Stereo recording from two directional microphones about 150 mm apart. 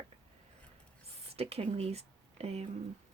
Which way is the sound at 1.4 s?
45° right (ahead or behind).